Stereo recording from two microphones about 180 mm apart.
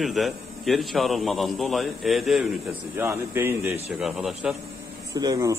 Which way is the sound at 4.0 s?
Centre (ahead or behind).